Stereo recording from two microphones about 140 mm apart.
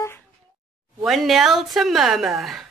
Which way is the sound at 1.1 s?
Centre (ahead or behind).